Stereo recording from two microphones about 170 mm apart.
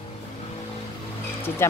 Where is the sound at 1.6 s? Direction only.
15° left (ahead or behind).